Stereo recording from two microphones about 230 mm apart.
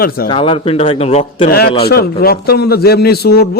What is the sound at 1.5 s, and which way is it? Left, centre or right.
A man's voice, left.